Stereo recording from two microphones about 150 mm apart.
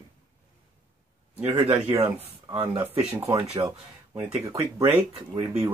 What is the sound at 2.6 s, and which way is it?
Speech, 15° right (ahead or behind).